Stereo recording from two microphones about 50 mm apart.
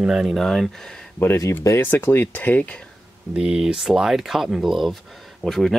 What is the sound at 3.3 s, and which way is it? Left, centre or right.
Speech, centre.